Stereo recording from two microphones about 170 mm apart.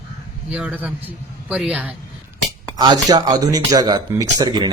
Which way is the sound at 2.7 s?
25° right (ahead or behind).